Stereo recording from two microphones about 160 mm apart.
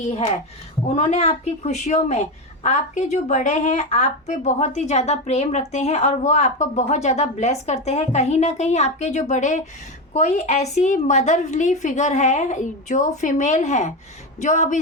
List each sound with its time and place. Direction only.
0.0 s a woman's voice: 50° left (ahead or behind)